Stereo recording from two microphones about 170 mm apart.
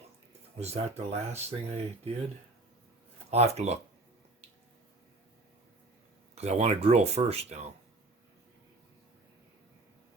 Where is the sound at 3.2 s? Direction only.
40° right (ahead or behind).